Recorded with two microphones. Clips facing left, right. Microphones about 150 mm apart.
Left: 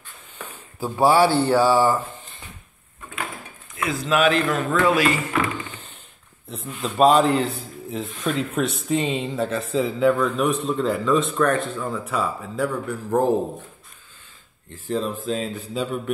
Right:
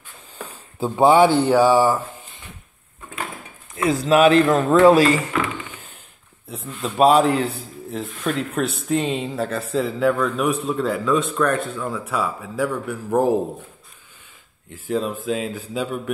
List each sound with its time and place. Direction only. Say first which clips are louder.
0.7 s speech: right 3 dB; 20° right (ahead or behind)
3.7 s speech: right 5 dB; 40° right (ahead or behind)
6.8 s speech: right 1 dB; 5° right (ahead or behind)
14.7 s speech: right 2 dB; 5° right (ahead or behind)